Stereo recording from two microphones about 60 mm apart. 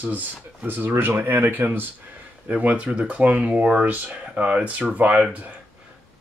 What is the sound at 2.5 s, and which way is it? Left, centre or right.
Speech, right.